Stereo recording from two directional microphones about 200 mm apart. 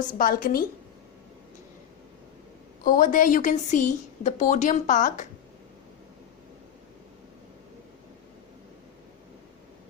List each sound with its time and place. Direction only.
0.1 s a woman's voice: 45° left (ahead or behind)
2.8 s a woman's voice: 40° left (ahead or behind)